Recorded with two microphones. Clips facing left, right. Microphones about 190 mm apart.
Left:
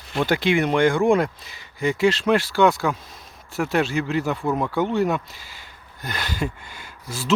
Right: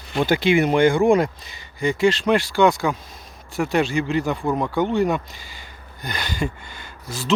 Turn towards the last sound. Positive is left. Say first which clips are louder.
# right 1 dB
turn(degrees=10)  # may be behind; listen again after turning